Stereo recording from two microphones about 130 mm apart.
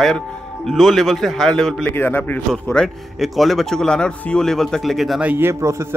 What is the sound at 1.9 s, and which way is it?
Speech, 15° left (ahead or behind).